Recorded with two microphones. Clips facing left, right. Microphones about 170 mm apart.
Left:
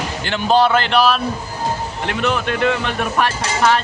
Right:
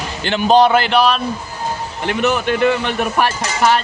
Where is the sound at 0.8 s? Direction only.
Centre (ahead or behind).